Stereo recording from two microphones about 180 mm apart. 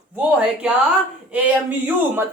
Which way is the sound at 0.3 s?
5° right (ahead or behind).